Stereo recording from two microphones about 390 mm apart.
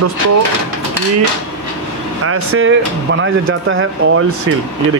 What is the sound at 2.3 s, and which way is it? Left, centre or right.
Speech, right.